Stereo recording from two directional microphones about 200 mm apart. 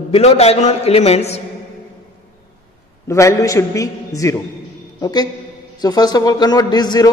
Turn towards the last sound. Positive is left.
turn(degrees=20)  # may be behind; listen again after turning